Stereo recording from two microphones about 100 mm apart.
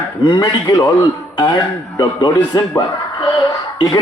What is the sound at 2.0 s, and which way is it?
A man's voice, 50° left (ahead or behind).